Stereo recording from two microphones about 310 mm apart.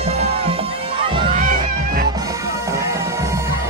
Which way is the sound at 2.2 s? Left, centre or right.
Centre.